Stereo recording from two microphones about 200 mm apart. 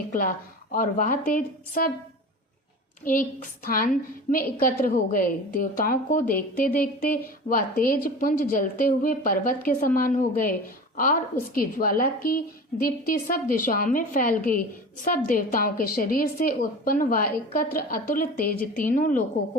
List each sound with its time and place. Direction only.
0.1 s a woman's voice: 45° left (ahead or behind)
3.0 s a woman's voice: 45° left (ahead or behind)